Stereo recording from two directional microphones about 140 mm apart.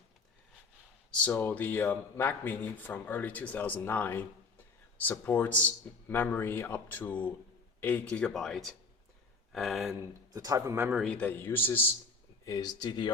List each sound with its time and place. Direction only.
1.1 s speech: 10° left (ahead or behind)
9.5 s a sound: centre (ahead or behind)
10.0 s a man's voice: 25° right (ahead or behind)
11.0 s speech: 10° left (ahead or behind)
12.5 s speech: 25° left (ahead or behind)